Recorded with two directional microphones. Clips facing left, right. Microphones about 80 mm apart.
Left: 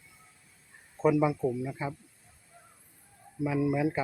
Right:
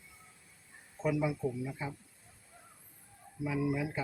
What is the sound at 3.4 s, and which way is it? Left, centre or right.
Speech, left.